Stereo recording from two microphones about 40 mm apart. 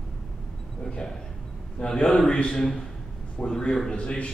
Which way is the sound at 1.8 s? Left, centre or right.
Centre.